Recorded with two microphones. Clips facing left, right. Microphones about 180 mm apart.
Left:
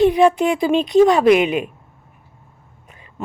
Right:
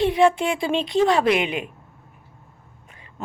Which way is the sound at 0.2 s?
20° left (ahead or behind).